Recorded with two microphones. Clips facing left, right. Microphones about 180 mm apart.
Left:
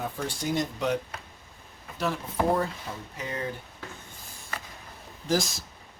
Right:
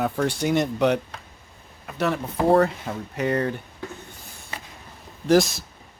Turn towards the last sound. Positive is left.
turn(degrees=-70)  # may be behind; listen again after turning